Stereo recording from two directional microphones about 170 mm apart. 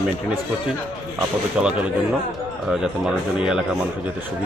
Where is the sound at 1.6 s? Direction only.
5° right (ahead or behind).